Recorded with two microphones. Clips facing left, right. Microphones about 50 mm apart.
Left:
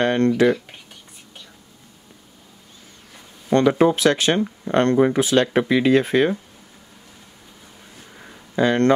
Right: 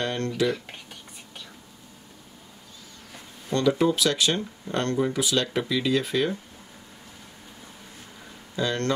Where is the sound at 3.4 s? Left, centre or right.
Left.